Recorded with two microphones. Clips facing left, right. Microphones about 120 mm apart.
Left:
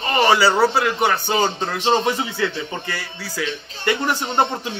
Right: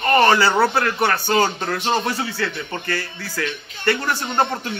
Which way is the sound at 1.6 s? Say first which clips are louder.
Left 2 dB; 30° left (ahead or behind).